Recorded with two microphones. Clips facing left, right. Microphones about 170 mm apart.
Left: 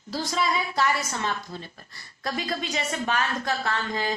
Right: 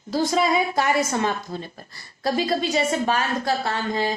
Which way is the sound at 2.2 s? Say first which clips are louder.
Right 8 dB; 30° right (ahead or behind).